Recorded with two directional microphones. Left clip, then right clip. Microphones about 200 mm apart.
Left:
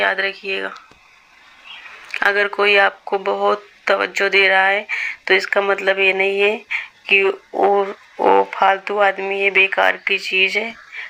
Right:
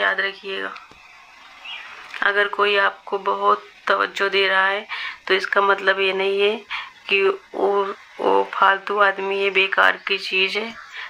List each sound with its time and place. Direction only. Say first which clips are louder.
0.0 s speech: left 2 dB; 15° left (ahead or behind)
2.1 s speech: left 2 dB; 20° left (ahead or behind); by 10.1 s centre (ahead or behind)
10.1 s speech: left 4 dB; 35° right (ahead or behind)
10.5 s speech: left 4 dB; centre (ahead or behind)